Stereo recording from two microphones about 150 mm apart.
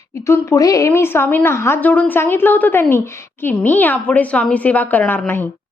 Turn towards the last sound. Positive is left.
turn(degrees=15)  # may be behind; listen again after turning